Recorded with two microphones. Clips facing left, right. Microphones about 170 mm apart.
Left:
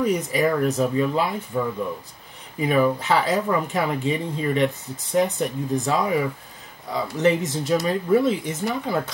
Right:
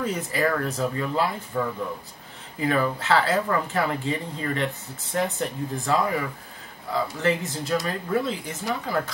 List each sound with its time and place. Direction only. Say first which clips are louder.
0.0 s speech: left 4 dB; 15° left (ahead or behind)
2.6 s speech: left 4 dB; 15° left (ahead or behind)